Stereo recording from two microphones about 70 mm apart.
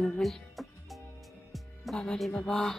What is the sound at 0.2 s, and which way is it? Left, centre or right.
Music, centre.